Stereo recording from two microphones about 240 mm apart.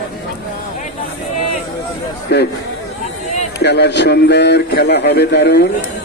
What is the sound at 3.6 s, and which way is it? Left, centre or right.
A man's voice, left.